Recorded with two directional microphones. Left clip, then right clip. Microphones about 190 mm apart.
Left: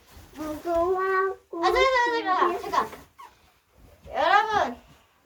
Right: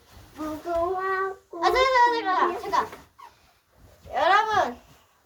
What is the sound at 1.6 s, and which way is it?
A child's voice, 50° right (ahead or behind).